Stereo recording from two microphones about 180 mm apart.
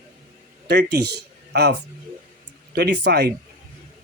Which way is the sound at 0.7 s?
65° right (ahead or behind).